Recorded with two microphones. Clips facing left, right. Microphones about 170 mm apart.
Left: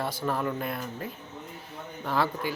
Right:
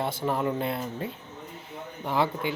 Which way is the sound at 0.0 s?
25° right (ahead or behind).